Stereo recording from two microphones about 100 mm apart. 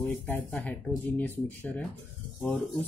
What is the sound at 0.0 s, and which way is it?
Speech, 15° left (ahead or behind).